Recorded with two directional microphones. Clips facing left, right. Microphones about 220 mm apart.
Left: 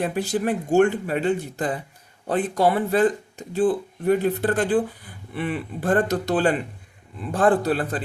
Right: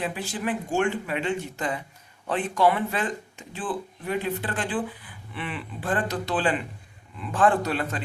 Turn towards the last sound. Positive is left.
turn(degrees=35)  # may be behind; listen again after turning